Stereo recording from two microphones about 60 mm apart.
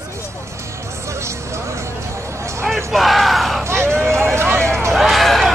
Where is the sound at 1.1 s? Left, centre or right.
Right.